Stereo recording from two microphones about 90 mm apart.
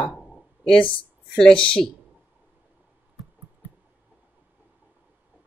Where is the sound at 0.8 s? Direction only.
75° left (ahead or behind).